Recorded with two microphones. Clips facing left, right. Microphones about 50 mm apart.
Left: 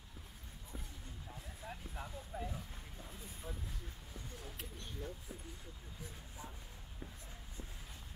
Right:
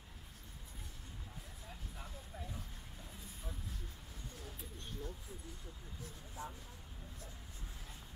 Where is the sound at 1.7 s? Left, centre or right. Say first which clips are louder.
Left 5 dB; left.